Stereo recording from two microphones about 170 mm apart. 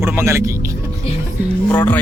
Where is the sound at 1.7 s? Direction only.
10° left (ahead or behind).